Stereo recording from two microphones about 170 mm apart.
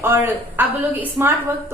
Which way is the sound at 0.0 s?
15° right (ahead or behind).